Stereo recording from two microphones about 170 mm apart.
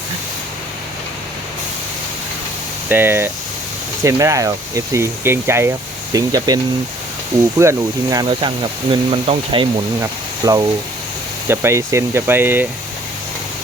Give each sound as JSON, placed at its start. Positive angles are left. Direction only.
{"t": 2.9, "sound": "speech", "side_deg": -15}
{"t": 7.6, "sound": "speech", "side_deg": -20}